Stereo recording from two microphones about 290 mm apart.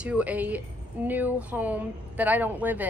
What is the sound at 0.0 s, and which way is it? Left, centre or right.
A woman's voice, centre.